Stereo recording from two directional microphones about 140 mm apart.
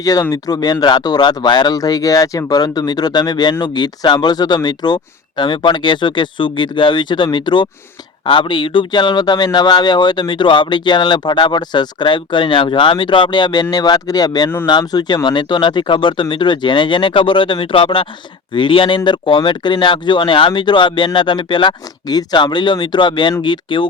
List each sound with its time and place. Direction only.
0.0 s speech: 25° left (ahead or behind)